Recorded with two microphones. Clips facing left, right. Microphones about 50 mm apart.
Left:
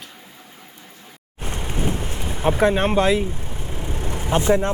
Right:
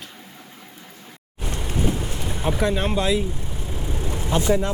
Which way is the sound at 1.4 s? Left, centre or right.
Left.